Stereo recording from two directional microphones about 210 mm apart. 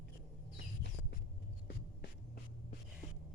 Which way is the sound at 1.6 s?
50° left (ahead or behind).